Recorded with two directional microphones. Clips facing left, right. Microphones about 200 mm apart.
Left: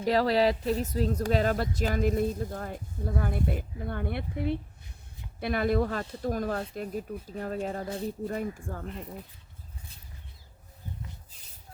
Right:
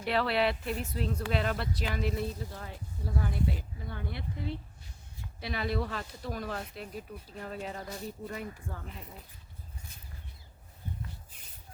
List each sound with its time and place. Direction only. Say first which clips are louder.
0.0 s speech: left 5 dB; 40° left (ahead or behind)